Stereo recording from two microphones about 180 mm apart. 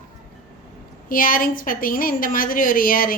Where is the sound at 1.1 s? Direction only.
50° left (ahead or behind).